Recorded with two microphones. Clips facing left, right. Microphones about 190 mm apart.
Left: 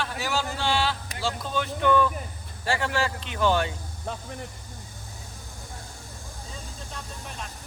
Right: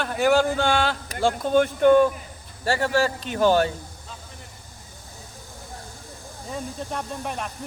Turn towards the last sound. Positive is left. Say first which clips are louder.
# right 9 dB
turn(degrees=-60)  # may be behind; listen again after turning